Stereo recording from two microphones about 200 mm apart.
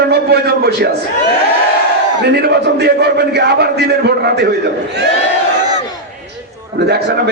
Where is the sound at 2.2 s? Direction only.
55° right (ahead or behind).